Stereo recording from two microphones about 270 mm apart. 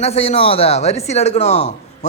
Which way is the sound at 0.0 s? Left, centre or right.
Left.